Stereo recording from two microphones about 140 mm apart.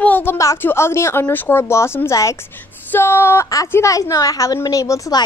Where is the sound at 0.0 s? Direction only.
15° left (ahead or behind).